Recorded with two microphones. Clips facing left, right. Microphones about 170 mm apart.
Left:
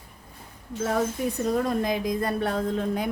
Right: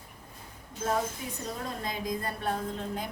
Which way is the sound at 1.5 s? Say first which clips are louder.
Left 11 dB; 80° left.